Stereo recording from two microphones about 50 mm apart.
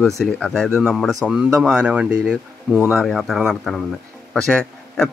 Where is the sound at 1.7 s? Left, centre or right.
Right.